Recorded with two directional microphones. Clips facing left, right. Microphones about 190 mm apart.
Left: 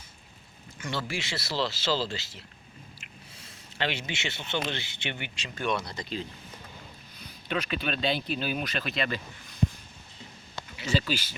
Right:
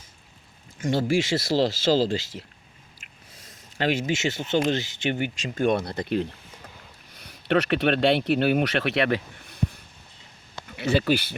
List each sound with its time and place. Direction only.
0.8 s speech: 45° right (ahead or behind)
7.1 s speech: 75° right (ahead or behind)